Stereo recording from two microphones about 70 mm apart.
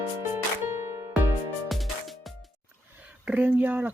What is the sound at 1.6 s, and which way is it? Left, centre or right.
Music, centre.